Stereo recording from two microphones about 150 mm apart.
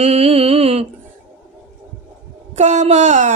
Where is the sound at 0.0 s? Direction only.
45° right (ahead or behind).